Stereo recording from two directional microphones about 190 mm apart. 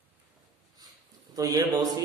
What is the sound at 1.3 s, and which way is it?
Speech, 20° right (ahead or behind).